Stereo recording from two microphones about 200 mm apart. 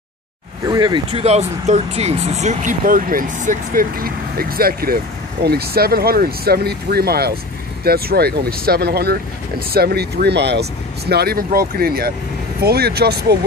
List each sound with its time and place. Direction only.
0.7 s speech: 20° right (ahead or behind); by 13.4 s 55° right (ahead or behind)